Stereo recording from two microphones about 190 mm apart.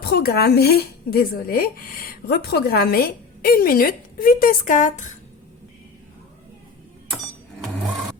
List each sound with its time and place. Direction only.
0.0 s speech: 55° left (ahead or behind)